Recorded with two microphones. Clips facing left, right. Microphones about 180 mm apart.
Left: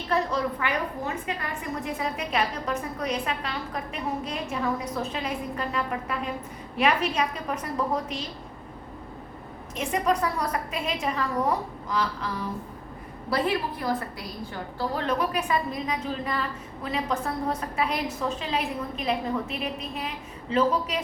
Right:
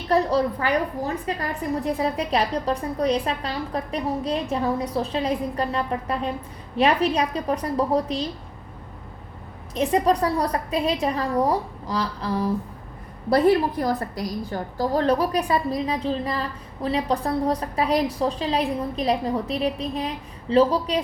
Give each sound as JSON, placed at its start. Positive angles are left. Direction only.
{"t": 0.1, "sound": "a woman's voice", "side_deg": -35}
{"t": 9.7, "sound": "a woman's voice", "side_deg": -35}